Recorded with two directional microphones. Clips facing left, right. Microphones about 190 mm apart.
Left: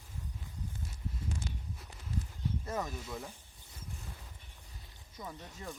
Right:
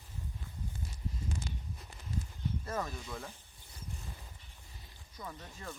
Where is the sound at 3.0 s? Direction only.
5° left (ahead or behind).